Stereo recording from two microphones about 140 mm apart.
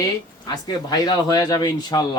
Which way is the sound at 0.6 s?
30° left (ahead or behind).